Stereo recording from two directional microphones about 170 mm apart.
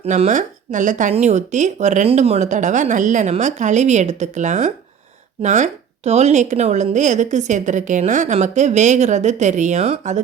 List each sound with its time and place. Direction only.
0.0 s a woman's voice: 40° right (ahead or behind)